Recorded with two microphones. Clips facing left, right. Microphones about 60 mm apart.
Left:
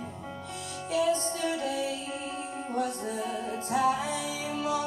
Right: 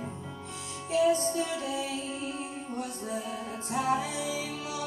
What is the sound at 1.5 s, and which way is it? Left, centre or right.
Music, left.